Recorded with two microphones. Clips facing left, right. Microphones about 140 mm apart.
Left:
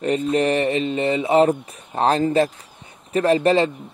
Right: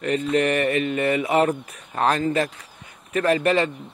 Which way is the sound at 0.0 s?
30° left (ahead or behind).